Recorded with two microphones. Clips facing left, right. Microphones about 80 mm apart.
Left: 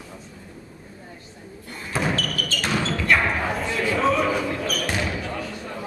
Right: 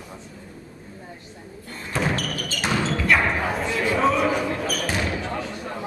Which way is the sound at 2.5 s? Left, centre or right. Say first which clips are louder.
Right 1 dB; centre.